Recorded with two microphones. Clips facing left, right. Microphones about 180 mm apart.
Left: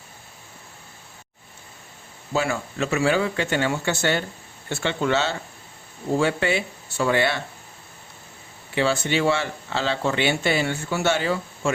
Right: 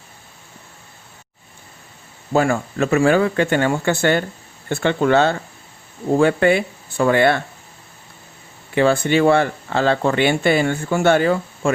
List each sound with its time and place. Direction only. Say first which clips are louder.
2.3 s speech: right 7 dB; 50° right (ahead or behind)
8.7 s speech: right 6 dB; 55° right (ahead or behind)